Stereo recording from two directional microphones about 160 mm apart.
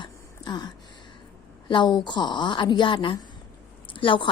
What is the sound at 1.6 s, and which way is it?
A woman's voice, 30° left (ahead or behind).